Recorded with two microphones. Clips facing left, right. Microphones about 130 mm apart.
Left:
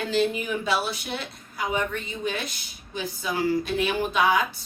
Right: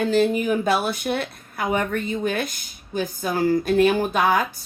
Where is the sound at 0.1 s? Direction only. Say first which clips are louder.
Right 2 dB; 45° right (ahead or behind).